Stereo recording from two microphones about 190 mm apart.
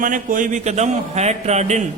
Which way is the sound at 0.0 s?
45° right (ahead or behind).